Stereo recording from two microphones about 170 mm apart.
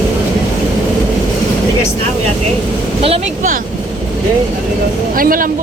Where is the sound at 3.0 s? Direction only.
35° right (ahead or behind).